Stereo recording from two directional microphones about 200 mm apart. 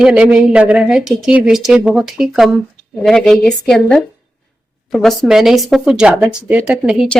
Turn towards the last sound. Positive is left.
turn(degrees=-5)  # may be behind; listen again after turning